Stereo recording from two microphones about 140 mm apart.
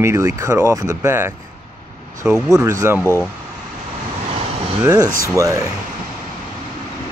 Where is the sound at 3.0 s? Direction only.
20° left (ahead or behind).